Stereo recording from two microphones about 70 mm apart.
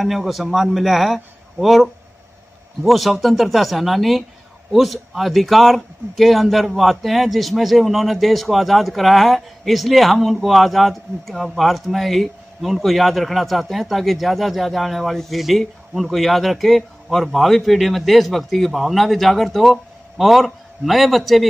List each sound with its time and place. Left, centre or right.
0.0 s speech: centre